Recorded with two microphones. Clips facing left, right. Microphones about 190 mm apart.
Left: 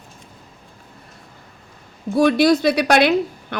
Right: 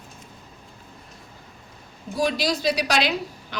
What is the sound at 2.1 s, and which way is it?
Speech, 60° left (ahead or behind).